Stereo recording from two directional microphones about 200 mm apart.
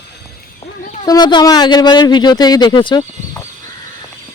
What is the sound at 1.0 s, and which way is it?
Speech, 20° left (ahead or behind).